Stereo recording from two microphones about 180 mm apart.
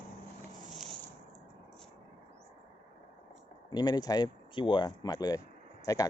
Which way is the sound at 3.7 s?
20° left (ahead or behind).